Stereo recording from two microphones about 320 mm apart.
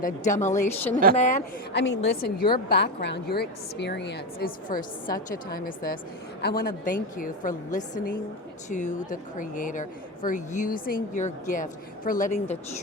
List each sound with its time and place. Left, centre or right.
0.0 s a woman's voice: left